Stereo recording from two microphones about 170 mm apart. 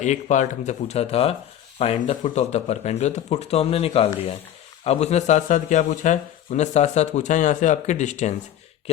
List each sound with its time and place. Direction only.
0.0 s speech: 45° left (ahead or behind)